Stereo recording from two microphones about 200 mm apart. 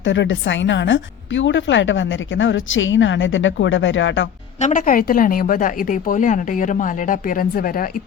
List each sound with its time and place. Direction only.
0.0 s speech: 70° left (ahead or behind)
4.6 s a woman's voice: 40° left (ahead or behind)